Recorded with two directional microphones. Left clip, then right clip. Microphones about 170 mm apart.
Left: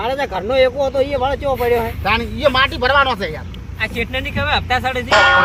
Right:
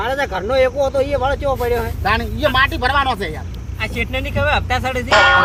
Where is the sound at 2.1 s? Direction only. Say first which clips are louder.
Left 1 dB; 25° right (ahead or behind).